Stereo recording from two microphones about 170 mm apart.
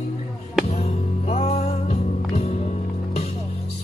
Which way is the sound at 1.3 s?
40° left (ahead or behind).